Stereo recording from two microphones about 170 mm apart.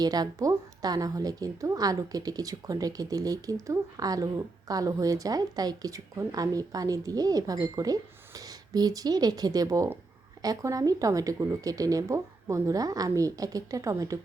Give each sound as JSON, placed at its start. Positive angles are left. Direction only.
{"t": 0.0, "sound": "a woman's voice", "side_deg": -20}